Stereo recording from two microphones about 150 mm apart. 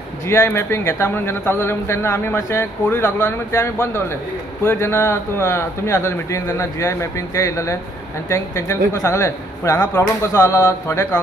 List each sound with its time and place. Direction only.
0.3 s a man's voice: 15° left (ahead or behind)